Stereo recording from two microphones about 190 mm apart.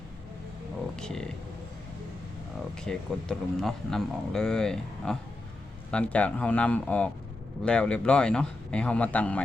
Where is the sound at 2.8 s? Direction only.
5° left (ahead or behind).